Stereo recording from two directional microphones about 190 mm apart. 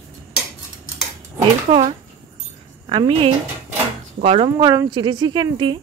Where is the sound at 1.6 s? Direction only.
35° right (ahead or behind).